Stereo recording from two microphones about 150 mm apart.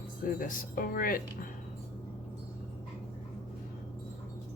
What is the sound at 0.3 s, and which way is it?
Speech, 65° left (ahead or behind).